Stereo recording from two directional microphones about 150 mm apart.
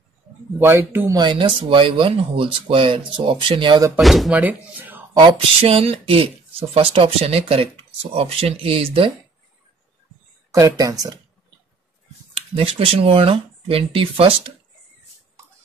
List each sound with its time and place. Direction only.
0.6 s speech: 15° right (ahead or behind)
1.1 s speech: 30° right (ahead or behind)
4.0 s speech: centre (ahead or behind)
5.2 s speech: 40° right (ahead or behind)
10.5 s speech: 25° right (ahead or behind)
12.4 s speech: 40° right (ahead or behind)